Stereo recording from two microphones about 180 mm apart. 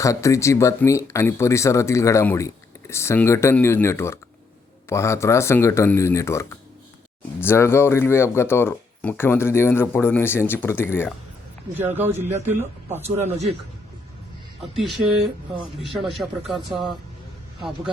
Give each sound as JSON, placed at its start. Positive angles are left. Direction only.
{"t": 0.0, "sound": "speech", "side_deg": 15}
{"t": 7.4, "sound": "speech", "side_deg": 15}
{"t": 11.9, "sound": "a man's voice", "side_deg": -10}
{"t": 14.7, "sound": "speech", "side_deg": 0}